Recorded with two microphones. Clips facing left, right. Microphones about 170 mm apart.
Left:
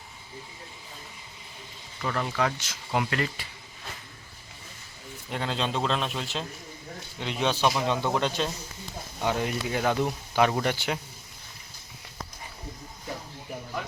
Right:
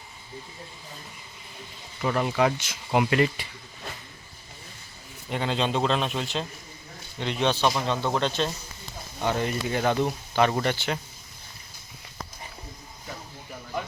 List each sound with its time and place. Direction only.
2.0 s speech: 15° right (ahead or behind)
5.3 s speech: centre (ahead or behind)